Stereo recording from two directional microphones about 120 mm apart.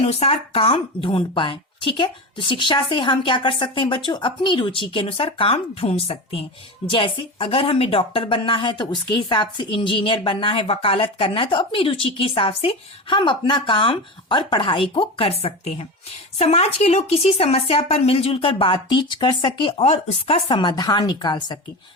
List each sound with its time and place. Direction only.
0.0 s a woman's voice: 55° left (ahead or behind); by 19.7 s 40° left (ahead or behind)
19.8 s speech: 55° left (ahead or behind); by 21.6 s 35° left (ahead or behind)